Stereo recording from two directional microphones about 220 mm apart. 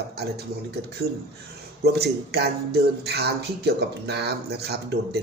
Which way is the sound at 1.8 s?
45° right (ahead or behind).